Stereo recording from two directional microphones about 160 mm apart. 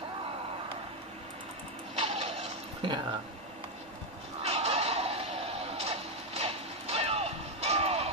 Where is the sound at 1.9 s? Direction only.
40° right (ahead or behind).